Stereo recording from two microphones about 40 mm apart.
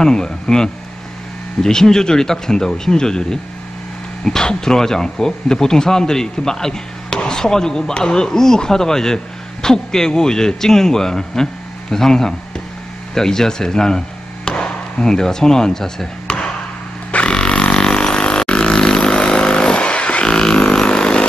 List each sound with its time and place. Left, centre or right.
0.0 s speech: centre
16.3 s chop: left
17.3 s vehicle: left
20.3 s vehicle: centre